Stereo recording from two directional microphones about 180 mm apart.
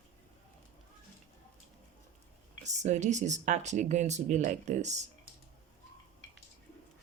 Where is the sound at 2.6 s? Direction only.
40° right (ahead or behind).